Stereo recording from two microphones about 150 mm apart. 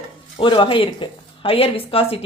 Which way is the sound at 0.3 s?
35° left (ahead or behind).